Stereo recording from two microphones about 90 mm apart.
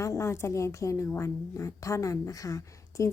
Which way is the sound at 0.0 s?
35° left (ahead or behind).